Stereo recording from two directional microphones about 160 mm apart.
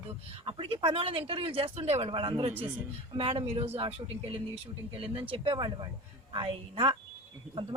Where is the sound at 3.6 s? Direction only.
35° right (ahead or behind).